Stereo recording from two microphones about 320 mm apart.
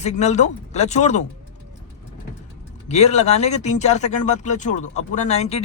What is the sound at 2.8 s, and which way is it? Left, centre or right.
Speech, left.